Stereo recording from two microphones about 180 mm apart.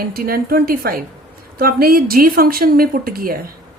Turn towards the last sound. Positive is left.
turn(degrees=-55)  # may be behind; listen again after turning